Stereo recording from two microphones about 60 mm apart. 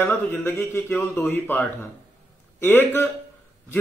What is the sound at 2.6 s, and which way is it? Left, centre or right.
Speech, left.